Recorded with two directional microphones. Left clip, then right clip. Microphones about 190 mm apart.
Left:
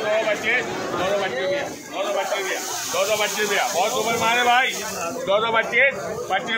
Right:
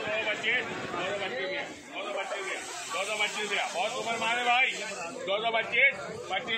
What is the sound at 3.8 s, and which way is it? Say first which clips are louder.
A man's voice: left 10 dB; 5° right (ahead or behind).